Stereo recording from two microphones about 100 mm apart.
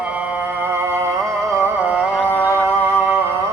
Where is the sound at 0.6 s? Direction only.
25° right (ahead or behind).